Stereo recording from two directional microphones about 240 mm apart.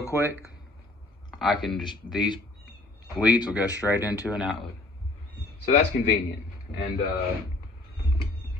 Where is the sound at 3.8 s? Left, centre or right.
Centre.